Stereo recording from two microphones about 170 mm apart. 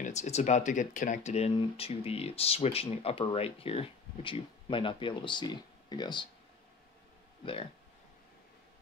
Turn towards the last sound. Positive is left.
turn(degrees=30)  # may be behind; listen again after turning